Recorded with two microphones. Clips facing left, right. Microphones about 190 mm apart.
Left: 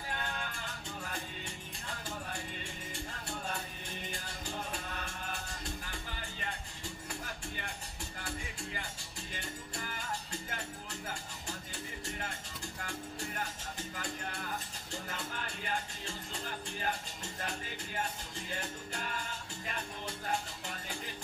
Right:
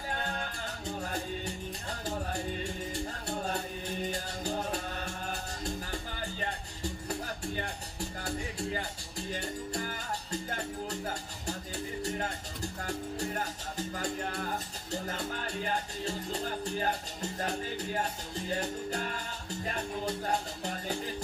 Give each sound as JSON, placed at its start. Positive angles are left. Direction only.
{"t": 0.1, "sound": "music", "side_deg": -40}
{"t": 7.1, "sound": "music", "side_deg": -40}
{"t": 12.8, "sound": "music", "side_deg": -40}